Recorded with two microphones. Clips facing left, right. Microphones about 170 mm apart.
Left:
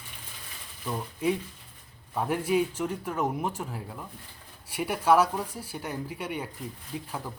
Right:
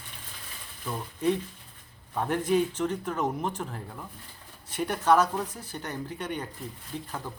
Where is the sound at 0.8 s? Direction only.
10° left (ahead or behind).